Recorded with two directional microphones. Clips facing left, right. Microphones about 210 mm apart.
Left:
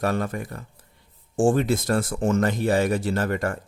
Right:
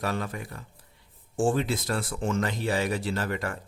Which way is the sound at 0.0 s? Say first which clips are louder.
Left 6 dB; 50° left (ahead or behind).